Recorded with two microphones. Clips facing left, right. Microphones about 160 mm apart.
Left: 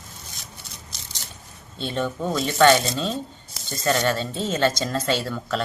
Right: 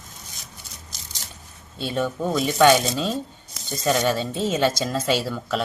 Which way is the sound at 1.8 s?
5° right (ahead or behind).